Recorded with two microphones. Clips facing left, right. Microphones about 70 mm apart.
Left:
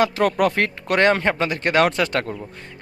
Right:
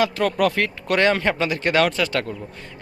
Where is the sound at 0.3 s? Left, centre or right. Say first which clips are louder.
Left 1 dB; left.